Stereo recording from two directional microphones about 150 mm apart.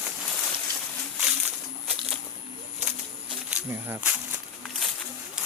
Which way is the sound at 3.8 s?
15° right (ahead or behind).